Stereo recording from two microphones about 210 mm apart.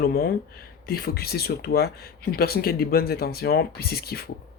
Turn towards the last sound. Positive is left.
turn(degrees=45)  # may be behind; listen again after turning